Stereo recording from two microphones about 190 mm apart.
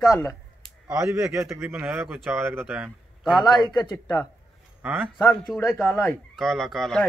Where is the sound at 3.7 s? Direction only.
20° left (ahead or behind).